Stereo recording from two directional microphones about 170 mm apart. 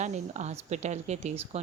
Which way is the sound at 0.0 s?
40° right (ahead or behind).